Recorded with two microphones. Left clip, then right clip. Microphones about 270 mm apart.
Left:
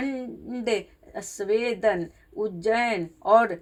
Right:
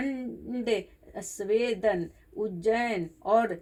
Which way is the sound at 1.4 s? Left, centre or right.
Left.